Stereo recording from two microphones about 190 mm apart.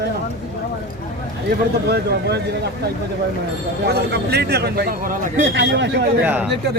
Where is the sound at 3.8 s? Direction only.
55° right (ahead or behind).